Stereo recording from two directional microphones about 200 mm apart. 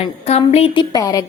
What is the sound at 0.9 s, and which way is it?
Speech, 15° left (ahead or behind).